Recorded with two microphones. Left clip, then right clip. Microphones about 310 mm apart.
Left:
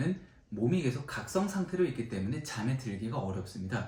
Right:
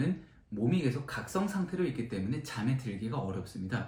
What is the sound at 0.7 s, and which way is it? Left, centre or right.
Speech, centre.